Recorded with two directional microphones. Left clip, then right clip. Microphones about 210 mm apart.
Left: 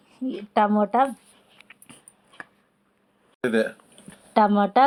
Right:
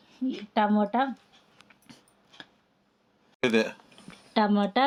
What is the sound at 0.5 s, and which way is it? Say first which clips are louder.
Speech: left 5 dB; 10° left (ahead or behind).